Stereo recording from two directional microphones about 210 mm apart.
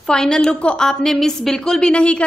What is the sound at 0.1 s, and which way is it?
A woman's voice, 5° left (ahead or behind).